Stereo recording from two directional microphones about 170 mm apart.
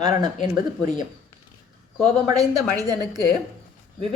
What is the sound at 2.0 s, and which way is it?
A woman's voice, 20° right (ahead or behind).